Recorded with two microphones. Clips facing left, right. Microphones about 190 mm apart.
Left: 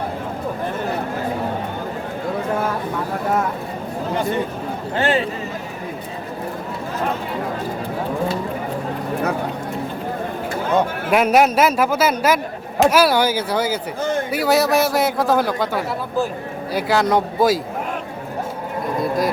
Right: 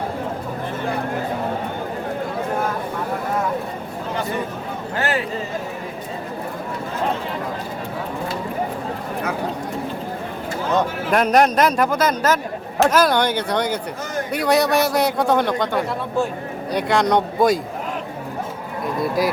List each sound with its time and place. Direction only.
4.9 s a sound: 25° left (ahead or behind)
10.8 s a man's voice: 5° left (ahead or behind)
18.9 s speech: centre (ahead or behind)